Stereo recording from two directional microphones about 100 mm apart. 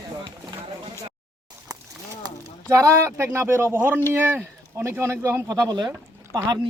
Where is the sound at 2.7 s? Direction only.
30° right (ahead or behind).